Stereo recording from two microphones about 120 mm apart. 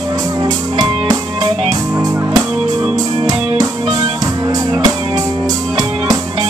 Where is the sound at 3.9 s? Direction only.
30° right (ahead or behind).